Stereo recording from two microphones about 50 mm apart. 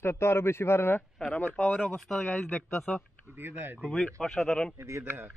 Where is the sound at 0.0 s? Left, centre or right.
Left.